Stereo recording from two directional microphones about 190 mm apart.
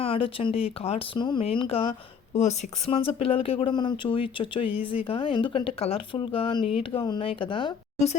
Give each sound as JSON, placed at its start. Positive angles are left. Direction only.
{"t": 0.0, "sound": "speech", "side_deg": 30}